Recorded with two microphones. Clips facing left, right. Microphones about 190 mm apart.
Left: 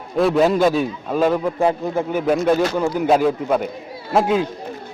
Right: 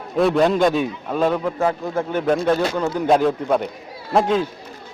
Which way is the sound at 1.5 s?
15° left (ahead or behind).